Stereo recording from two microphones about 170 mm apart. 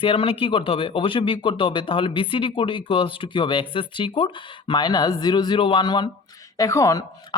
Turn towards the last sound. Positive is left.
turn(degrees=20)  # may be behind; listen again after turning